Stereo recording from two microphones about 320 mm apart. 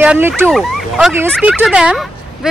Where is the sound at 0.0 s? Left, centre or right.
Centre.